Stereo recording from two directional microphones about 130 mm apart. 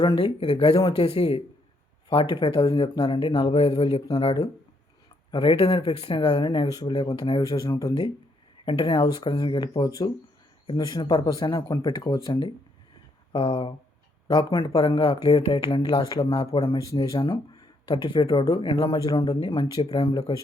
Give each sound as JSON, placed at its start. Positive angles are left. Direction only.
{"t": 0.0, "sound": "speech", "side_deg": 35}
{"t": 1.0, "sound": "speech", "side_deg": 50}
{"t": 4.1, "sound": "speech", "side_deg": 35}
{"t": 18.9, "sound": "speech", "side_deg": 30}
{"t": 19.8, "sound": "speech", "side_deg": 50}